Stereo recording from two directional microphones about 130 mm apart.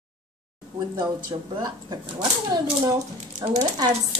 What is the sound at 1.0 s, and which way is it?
Speech, 35° right (ahead or behind).